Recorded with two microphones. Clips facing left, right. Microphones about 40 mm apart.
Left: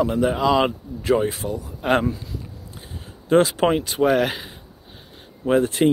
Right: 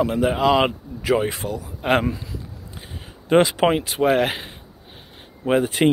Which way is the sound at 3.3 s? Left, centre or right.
Right.